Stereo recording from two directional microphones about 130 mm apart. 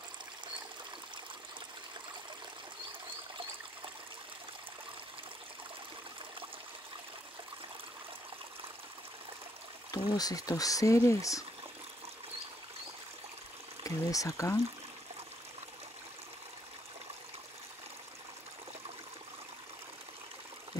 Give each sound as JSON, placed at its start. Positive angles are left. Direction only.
{"t": 9.8, "sound": "speech", "side_deg": 30}
{"t": 13.8, "sound": "speech", "side_deg": 25}